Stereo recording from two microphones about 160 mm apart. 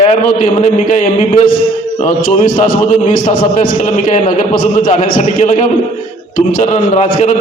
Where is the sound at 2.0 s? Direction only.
55° left (ahead or behind).